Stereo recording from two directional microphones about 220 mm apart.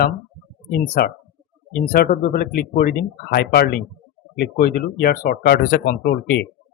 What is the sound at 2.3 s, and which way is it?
Speech, 45° left (ahead or behind).